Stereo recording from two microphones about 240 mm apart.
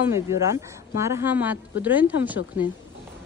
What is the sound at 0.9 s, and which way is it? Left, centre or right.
Speech, centre.